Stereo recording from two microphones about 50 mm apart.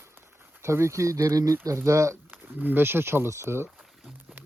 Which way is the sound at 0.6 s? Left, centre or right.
Right.